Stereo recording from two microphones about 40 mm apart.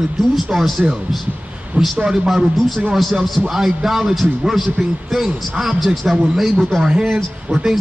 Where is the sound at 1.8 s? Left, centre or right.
Right.